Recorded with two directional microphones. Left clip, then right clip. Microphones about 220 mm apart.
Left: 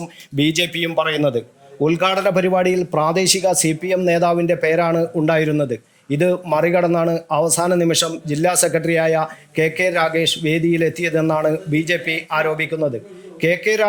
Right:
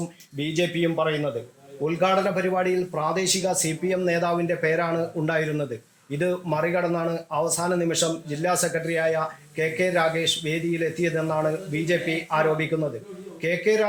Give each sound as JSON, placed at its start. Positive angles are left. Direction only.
{"t": 0.3, "sound": "speech", "side_deg": 50}